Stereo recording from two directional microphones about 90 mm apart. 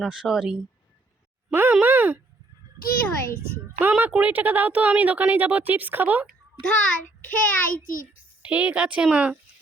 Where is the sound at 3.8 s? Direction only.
20° right (ahead or behind).